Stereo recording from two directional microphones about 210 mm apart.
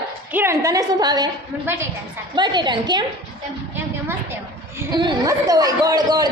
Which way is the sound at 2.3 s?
20° right (ahead or behind).